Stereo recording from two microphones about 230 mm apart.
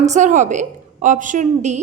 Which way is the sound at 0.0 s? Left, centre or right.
Right.